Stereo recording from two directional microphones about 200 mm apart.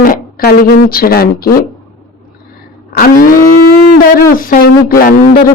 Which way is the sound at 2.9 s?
45° left (ahead or behind).